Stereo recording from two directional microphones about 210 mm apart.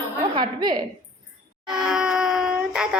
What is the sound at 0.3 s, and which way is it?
Speech, 20° right (ahead or behind).